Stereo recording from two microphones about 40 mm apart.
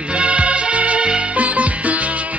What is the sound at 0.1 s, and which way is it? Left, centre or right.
Music, right.